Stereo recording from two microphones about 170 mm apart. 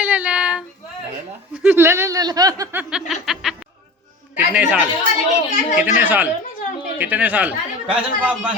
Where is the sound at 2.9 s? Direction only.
Centre (ahead or behind).